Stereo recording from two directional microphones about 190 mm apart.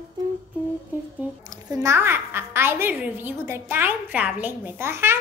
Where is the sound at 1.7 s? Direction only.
15° right (ahead or behind).